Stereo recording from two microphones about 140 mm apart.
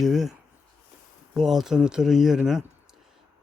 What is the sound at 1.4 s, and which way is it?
Speech, centre (ahead or behind).